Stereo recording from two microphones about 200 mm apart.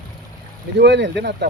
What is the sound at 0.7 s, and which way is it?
Speech, 60° right (ahead or behind).